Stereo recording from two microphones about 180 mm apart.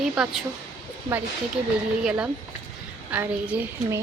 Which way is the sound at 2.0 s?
5° right (ahead or behind).